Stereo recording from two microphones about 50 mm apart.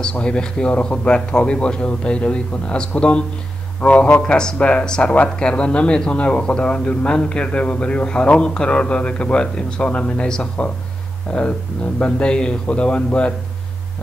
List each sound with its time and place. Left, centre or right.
0.1 s a man's voice: centre